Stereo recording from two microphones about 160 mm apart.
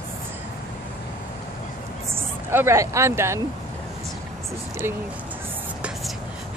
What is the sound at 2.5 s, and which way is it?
Speech, 15° right (ahead or behind).